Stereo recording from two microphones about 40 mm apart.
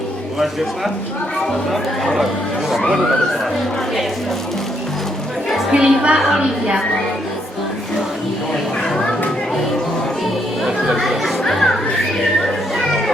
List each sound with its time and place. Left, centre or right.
1.7 s speech: centre
5.7 s a woman's voice: right
10.9 s chatter: centre
11.4 s children playing: centre